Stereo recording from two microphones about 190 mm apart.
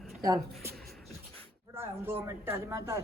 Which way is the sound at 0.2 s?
20° right (ahead or behind).